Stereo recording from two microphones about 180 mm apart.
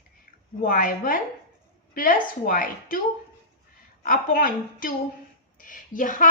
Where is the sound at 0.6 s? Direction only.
50° left (ahead or behind).